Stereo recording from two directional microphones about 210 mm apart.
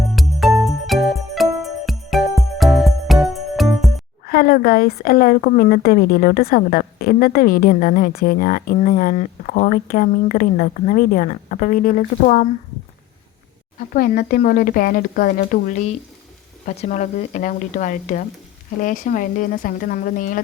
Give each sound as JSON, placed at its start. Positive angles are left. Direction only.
{"t": 0.2, "sound": "music", "side_deg": 0}
{"t": 4.3, "sound": "a woman's voice", "side_deg": 45}
{"t": 13.9, "sound": "a woman's voice", "side_deg": 45}